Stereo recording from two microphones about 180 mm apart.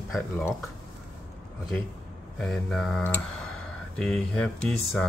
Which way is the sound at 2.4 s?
5° left (ahead or behind).